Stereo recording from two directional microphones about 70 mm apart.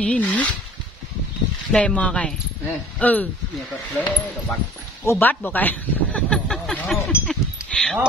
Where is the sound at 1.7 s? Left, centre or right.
Centre.